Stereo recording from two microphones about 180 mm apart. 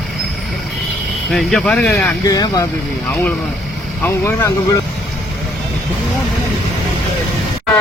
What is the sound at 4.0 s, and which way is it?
Speech, 15° left (ahead or behind).